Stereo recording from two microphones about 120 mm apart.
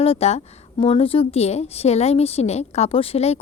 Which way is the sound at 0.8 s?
50° left (ahead or behind).